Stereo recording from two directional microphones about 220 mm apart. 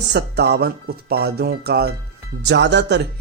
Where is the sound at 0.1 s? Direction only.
50° right (ahead or behind).